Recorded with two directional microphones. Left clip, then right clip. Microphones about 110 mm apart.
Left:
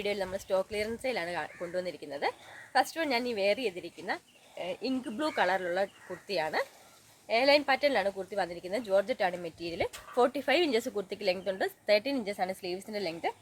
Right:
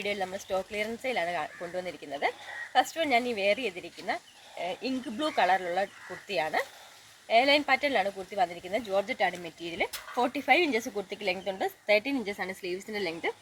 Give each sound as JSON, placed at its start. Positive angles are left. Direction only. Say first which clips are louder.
{"t": 0.0, "sound": "a woman's voice", "louder": "right 1 dB", "side_deg": 45}
{"t": 4.5, "sound": "speech", "louder": "right 2 dB", "side_deg": 30}
{"t": 5.1, "sound": "a woman's voice", "louder": "right 4 dB", "side_deg": 50}